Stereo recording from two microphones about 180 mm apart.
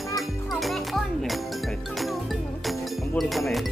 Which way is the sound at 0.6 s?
Centre (ahead or behind).